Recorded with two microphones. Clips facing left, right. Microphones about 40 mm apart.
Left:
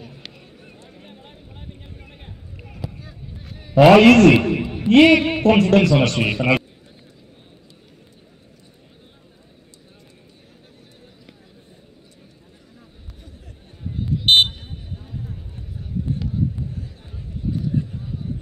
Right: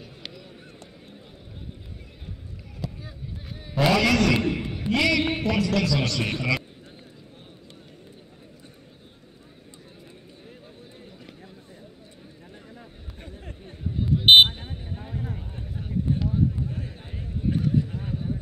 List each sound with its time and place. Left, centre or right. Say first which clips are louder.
2.8 s boat: left 1 dB; centre
3.8 s speech: left 11 dB; left
4.8 s music: left 11 dB; left
5.5 s speech: left 13 dB; left
14.3 s vehicle: right 1 dB; centre
14.6 s vehicle: right 1 dB; right